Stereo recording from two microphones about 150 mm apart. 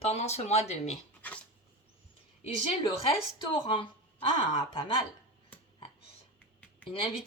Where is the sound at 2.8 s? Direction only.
35° left (ahead or behind).